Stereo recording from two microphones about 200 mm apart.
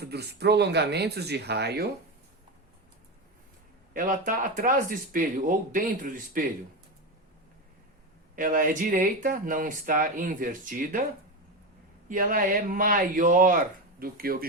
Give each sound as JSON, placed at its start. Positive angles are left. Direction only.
{"t": 0.0, "sound": "speech", "side_deg": -55}
{"t": 3.9, "sound": "speech", "side_deg": -45}
{"t": 8.4, "sound": "speech", "side_deg": -45}
{"t": 12.0, "sound": "speech", "side_deg": -45}